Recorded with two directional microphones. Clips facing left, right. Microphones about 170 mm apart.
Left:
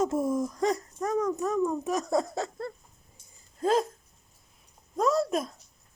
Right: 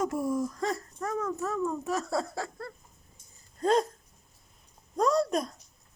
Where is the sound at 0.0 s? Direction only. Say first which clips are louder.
Left 2 dB; 25° left (ahead or behind).